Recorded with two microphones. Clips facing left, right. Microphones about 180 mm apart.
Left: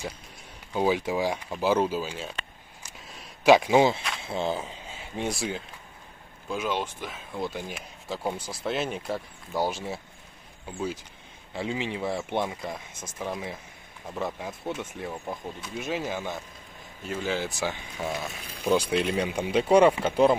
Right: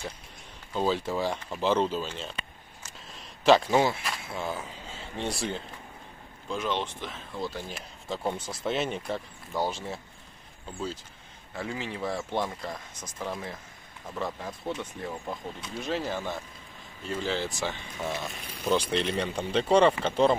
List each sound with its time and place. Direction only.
0.7 s speech: 10° left (ahead or behind)
2.8 s a sound: 10° left (ahead or behind)
4.2 s speech: 25° left (ahead or behind)
4.9 s speech: 10° left (ahead or behind)
7.7 s speech: 5° left (ahead or behind)
11.5 s speech: 20° left (ahead or behind)
14.7 s speech: 5° left (ahead or behind)
16.1 s speech: 15° left (ahead or behind)